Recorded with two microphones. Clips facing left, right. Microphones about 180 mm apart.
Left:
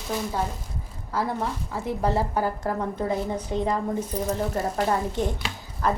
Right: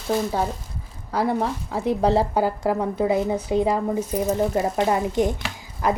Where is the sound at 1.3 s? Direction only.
20° right (ahead or behind).